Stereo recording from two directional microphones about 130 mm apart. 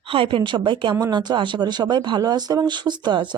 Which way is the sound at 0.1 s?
45° right (ahead or behind).